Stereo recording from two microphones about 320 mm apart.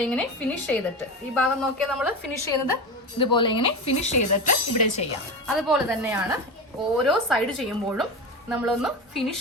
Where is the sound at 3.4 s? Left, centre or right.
Left.